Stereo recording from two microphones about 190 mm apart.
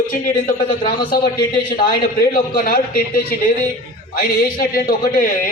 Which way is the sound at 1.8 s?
50° left (ahead or behind).